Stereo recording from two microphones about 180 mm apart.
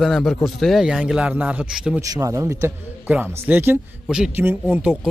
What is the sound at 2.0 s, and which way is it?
A man's voice, 20° right (ahead or behind).